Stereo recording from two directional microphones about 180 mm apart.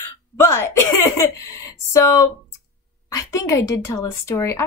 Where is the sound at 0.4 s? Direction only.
15° left (ahead or behind).